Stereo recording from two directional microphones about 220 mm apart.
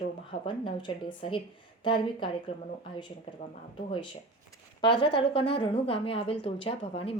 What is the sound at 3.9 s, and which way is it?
Speech, 20° left (ahead or behind).